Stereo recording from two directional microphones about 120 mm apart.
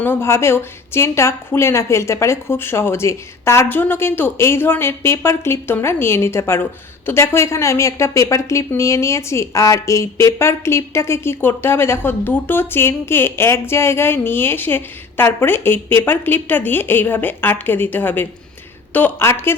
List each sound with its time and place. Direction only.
0.0 s a woman's voice: 20° left (ahead or behind)